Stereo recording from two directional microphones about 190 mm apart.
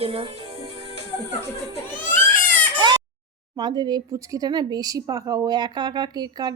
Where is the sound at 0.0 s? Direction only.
30° right (ahead or behind).